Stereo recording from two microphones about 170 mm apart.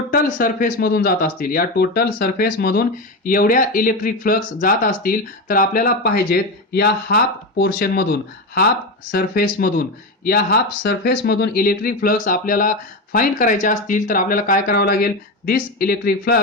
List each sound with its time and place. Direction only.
0.1 s speech: 55° left (ahead or behind)